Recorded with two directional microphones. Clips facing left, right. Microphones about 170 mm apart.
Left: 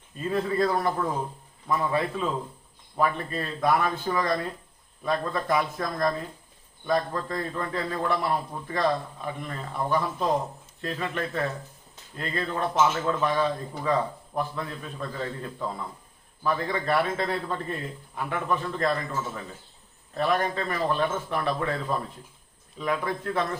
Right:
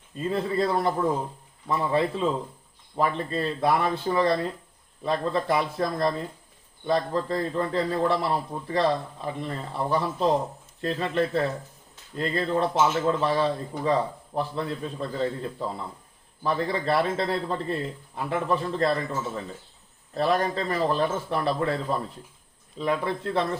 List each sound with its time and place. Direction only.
0.3 s a man's voice: 25° right (ahead or behind)
20.1 s a man's voice: 35° right (ahead or behind)